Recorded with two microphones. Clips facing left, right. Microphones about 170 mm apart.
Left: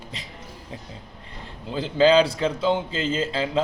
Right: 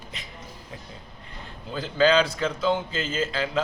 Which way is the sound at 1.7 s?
25° left (ahead or behind).